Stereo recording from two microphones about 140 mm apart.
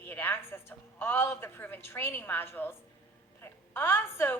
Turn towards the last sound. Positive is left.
turn(degrees=15)  # may be behind; listen again after turning